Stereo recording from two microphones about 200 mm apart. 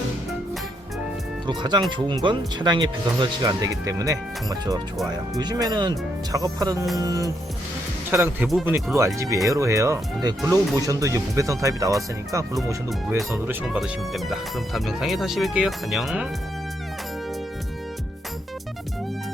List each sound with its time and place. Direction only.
1.5 s speech: 20° right (ahead or behind)
8.4 s speech: centre (ahead or behind)
9.0 s speech: 15° right (ahead or behind)
12.9 s speech: centre (ahead or behind)